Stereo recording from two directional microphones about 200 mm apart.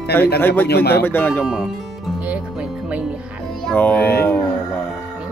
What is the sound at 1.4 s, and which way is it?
Speech, centre (ahead or behind).